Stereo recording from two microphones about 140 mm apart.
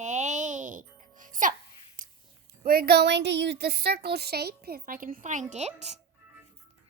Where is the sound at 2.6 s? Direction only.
90° right.